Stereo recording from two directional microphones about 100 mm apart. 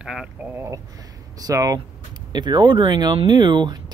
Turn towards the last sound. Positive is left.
turn(degrees=-50)  # may be behind; listen again after turning